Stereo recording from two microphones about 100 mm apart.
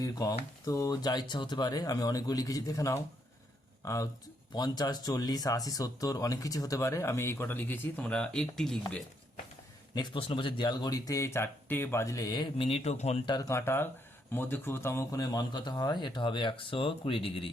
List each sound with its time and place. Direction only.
0.0 s speech: 40° left (ahead or behind); by 8.8 s 5° left (ahead or behind)
9.9 s speech: 50° left (ahead or behind)
12.5 s a man's voice: 80° left
13.2 s speech: 45° left (ahead or behind)
13.5 s speech: 25° left (ahead or behind)
15.2 s speech: 40° left (ahead or behind); by 17.5 s 65° left (ahead or behind)